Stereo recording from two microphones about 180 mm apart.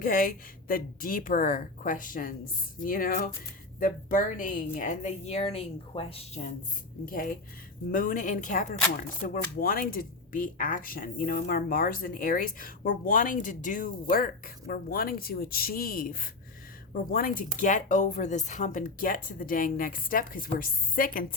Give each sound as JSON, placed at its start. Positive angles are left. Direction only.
{"t": 0.0, "sound": "speech", "side_deg": 50}
{"t": 7.1, "sound": "speech", "side_deg": 50}